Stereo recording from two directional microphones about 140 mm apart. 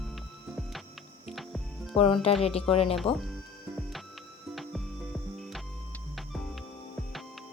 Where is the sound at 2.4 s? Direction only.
45° left (ahead or behind).